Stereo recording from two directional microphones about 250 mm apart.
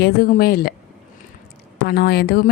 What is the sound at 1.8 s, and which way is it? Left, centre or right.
Speech, left.